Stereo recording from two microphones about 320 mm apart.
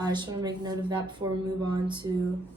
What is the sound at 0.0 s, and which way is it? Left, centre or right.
A woman's voice, centre.